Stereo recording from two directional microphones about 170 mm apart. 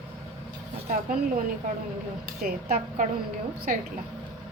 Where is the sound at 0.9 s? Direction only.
55° right (ahead or behind).